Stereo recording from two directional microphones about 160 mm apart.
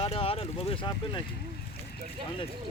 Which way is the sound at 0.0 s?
35° left (ahead or behind).